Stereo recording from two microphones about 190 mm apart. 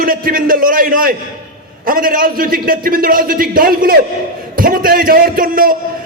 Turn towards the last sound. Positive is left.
turn(degrees=-50)  # may be behind; listen again after turning